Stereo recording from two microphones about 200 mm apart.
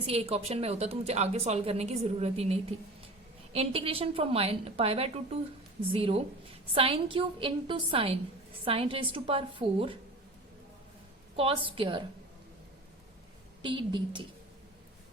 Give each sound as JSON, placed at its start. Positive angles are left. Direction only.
{"t": 0.0, "sound": "a woman's voice", "side_deg": -30}
{"t": 11.3, "sound": "a woman's voice", "side_deg": -25}
{"t": 13.6, "sound": "a woman's voice", "side_deg": -25}